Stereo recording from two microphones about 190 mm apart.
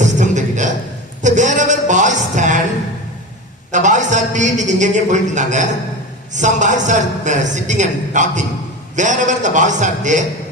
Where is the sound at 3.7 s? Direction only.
40° right (ahead or behind).